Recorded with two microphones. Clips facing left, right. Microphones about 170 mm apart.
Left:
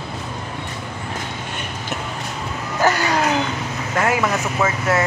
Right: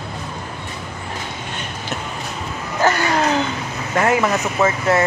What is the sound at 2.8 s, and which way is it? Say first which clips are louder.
Vehicle: right 1 dB; 15° left (ahead or behind).